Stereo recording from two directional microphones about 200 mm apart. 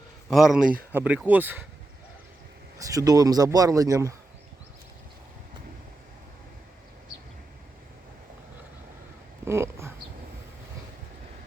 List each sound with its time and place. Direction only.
0.3 s speech: centre (ahead or behind)
2.7 s speech: 15° right (ahead or behind)
9.4 s a sound: 10° right (ahead or behind)